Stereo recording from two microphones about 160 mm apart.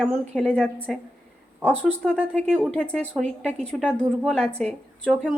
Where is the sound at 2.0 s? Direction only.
5° left (ahead or behind).